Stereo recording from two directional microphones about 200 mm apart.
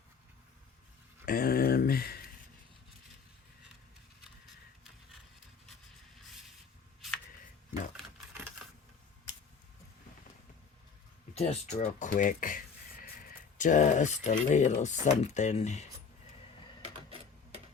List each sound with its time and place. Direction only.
1.2 s speech: 45° left (ahead or behind)
11.3 s speech: 35° left (ahead or behind)